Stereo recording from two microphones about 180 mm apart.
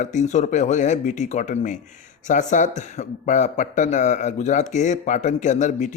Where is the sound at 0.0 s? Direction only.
40° left (ahead or behind).